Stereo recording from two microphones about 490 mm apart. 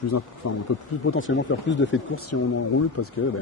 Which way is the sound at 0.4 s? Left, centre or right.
Left.